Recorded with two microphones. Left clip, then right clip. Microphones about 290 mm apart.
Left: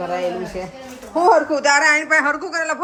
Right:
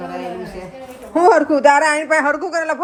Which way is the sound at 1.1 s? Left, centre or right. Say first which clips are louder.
Right 2 dB; right.